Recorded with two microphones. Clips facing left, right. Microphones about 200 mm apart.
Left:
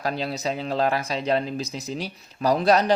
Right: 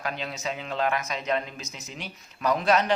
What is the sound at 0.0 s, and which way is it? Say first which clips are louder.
A man's voice: left 6 dB; 35° left (ahead or behind).